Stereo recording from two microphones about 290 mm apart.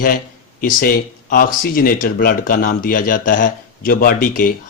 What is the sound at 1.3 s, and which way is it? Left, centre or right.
Speech, left.